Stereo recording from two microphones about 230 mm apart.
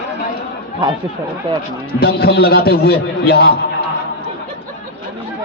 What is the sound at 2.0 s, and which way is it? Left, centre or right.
A man's voice, left.